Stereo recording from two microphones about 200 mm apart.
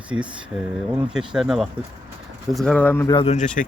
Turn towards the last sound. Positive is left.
turn(degrees=40)  # may be behind; listen again after turning